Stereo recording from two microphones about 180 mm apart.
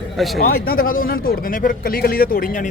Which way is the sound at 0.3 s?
55° left (ahead or behind).